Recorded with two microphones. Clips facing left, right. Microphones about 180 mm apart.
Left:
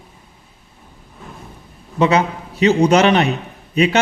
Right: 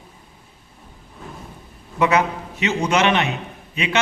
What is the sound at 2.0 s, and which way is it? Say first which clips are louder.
A man's voice: left 3 dB; 30° left (ahead or behind).